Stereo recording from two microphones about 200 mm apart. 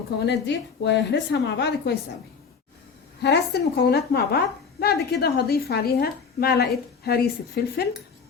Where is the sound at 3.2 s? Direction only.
55° left (ahead or behind).